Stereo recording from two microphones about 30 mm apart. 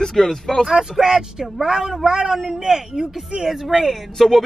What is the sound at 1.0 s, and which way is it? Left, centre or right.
Speech, centre.